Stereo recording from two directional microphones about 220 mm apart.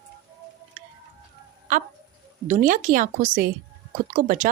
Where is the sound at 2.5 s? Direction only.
35° right (ahead or behind).